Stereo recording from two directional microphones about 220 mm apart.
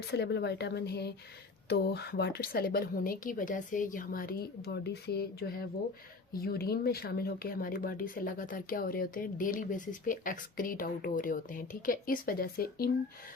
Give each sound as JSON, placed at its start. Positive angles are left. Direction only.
{"t": 0.1, "sound": "speech", "side_deg": 50}